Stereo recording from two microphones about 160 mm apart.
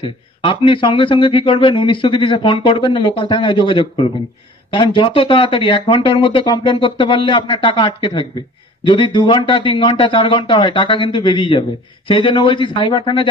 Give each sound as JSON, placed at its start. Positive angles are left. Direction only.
{"t": 0.0, "sound": "a man's voice", "side_deg": 30}